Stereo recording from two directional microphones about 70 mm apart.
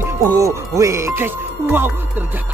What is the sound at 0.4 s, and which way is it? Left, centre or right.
Speech, right.